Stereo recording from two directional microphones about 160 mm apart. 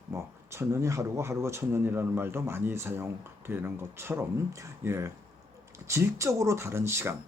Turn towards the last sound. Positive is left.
turn(degrees=-15)  # may be behind; listen again after turning